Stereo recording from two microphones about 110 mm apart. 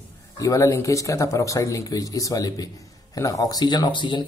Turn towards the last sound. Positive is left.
turn(degrees=45)  # may be behind; listen again after turning